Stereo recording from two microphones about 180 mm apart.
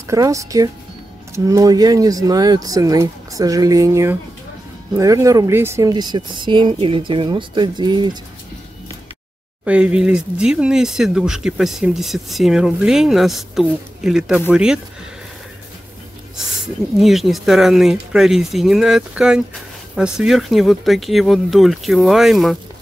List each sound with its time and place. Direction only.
0.1 s speech: 15° right (ahead or behind)
9.7 s speech: 5° right (ahead or behind)
17.0 s speech: centre (ahead or behind)